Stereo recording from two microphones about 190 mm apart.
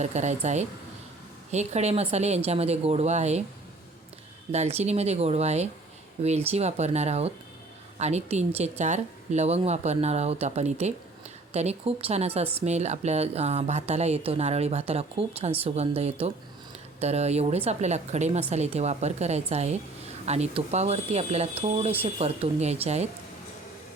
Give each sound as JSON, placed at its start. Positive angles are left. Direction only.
{"t": 0.0, "sound": "speech", "side_deg": -40}
{"t": 4.5, "sound": "speech", "side_deg": -35}